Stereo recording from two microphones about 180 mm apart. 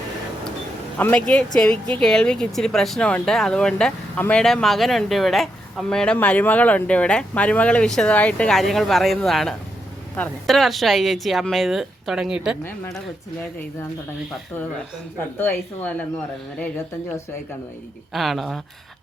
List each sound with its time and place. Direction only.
0.9 s speech: 10° left (ahead or behind)
15.4 s speech: 10° left (ahead or behind)
18.1 s speech: centre (ahead or behind)